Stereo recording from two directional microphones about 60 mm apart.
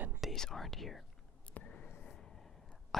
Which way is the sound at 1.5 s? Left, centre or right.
Left.